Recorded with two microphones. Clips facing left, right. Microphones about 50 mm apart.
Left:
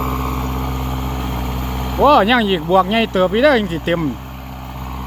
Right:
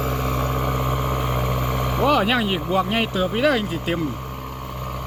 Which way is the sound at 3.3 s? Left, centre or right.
Left.